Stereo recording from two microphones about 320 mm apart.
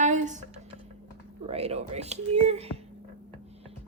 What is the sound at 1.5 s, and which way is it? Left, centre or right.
A woman's voice, centre.